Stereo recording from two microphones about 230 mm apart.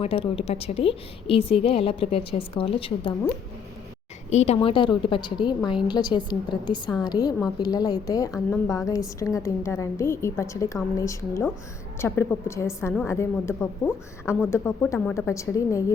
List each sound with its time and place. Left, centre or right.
0.0 s a woman's voice: left
4.3 s a woman's voice: left